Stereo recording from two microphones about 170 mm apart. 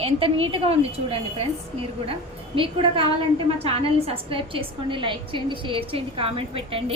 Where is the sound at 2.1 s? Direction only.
30° right (ahead or behind).